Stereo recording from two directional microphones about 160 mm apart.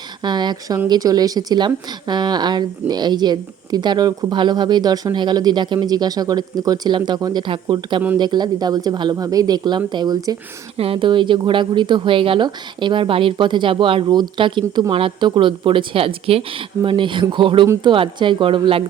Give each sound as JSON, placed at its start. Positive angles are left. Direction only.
{"t": 0.2, "sound": "a woman's voice", "side_deg": -25}
{"t": 10.8, "sound": "speech", "side_deg": -35}